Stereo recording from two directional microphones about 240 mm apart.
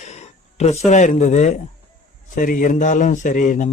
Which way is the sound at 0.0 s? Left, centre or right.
Left.